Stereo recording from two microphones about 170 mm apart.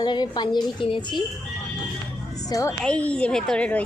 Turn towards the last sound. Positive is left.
turn(degrees=10)  # may be behind; listen again after turning